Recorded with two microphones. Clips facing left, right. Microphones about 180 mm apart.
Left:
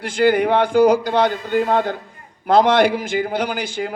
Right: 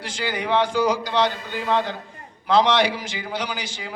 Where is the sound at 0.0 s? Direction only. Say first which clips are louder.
Left 12 dB; 55° left (ahead or behind).